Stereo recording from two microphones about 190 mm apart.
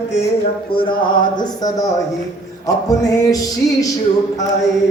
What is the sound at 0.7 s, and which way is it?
A man's voice, 25° left (ahead or behind).